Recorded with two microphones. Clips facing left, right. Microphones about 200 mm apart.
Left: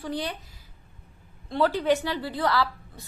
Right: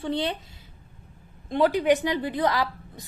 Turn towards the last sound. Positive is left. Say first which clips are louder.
# left 1 dB
turn(degrees=-15)  # may be behind; listen again after turning